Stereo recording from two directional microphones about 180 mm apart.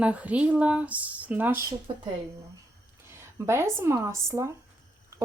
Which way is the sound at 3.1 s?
15° right (ahead or behind).